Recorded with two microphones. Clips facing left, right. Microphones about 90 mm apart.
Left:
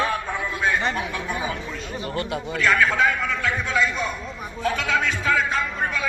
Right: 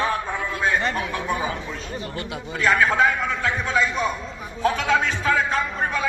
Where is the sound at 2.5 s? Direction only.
35° right (ahead or behind).